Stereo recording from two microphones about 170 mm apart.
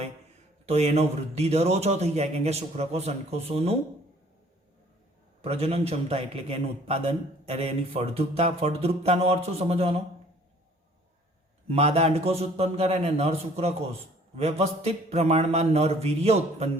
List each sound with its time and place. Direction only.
0.6 s a man's voice: 40° right (ahead or behind)
5.4 s a man's voice: 35° right (ahead or behind)
11.7 s a man's voice: 40° right (ahead or behind)